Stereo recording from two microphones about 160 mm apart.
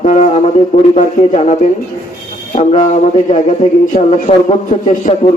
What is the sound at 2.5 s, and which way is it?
Speech, 50° left (ahead or behind).